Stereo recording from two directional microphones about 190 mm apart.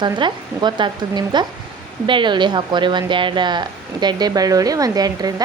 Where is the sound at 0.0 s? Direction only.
25° right (ahead or behind).